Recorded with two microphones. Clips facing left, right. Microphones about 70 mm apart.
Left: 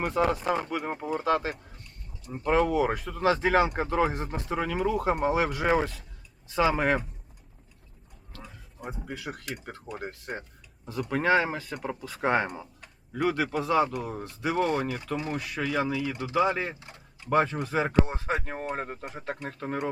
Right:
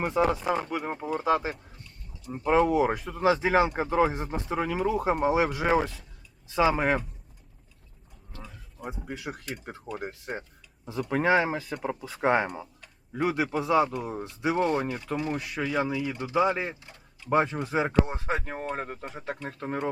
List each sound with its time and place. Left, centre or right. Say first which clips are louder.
0.0 s speech: right 1 dB; centre
1.2 s speech: right 1 dB; centre
1.5 s a sound: left 1 dB; centre
2.4 s speech: right 2 dB; centre
5.6 s speech: even; centre
8.4 s a sound: right 1 dB; centre
9.2 s speech: even; centre
11.1 s speech: right 1 dB; centre
14.8 s speech: right 1 dB; centre
15.4 s speech: even; centre
16.8 s a sound: left 2 dB; centre
17.2 s speech: even; centre